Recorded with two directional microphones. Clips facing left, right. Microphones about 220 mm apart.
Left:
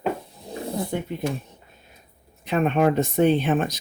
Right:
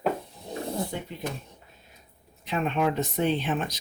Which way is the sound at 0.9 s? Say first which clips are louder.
Left 7 dB; 55° left (ahead or behind).